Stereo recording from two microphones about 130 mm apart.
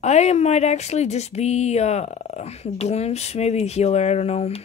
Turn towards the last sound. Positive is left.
turn(degrees=55)  # may be behind; listen again after turning